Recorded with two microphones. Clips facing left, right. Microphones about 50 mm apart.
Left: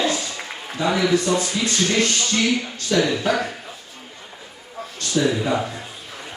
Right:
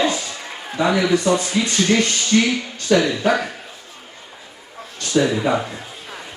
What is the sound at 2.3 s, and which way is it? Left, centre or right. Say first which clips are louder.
Speech: right 6 dB; right.